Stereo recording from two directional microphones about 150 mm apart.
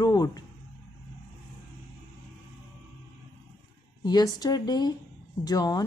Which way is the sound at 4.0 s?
25° left (ahead or behind).